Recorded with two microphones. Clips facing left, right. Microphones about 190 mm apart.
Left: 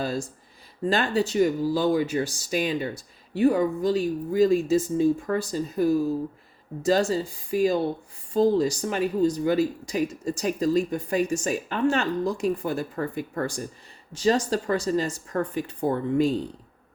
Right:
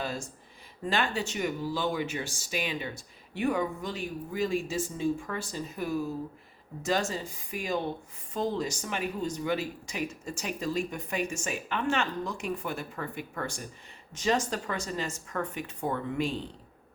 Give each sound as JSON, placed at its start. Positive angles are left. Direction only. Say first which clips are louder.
{"t": 0.0, "sound": "speech", "louder": "left 7 dB", "side_deg": 35}